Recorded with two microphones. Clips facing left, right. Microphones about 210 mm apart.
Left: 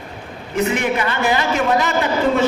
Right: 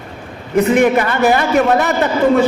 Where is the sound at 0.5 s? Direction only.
50° right (ahead or behind).